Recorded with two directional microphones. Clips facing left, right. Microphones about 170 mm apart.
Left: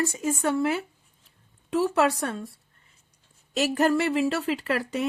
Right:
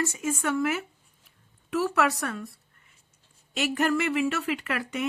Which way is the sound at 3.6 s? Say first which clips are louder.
Left 3 dB; 35° left (ahead or behind).